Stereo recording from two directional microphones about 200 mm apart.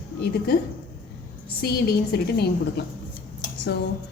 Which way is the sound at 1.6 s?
50° left (ahead or behind).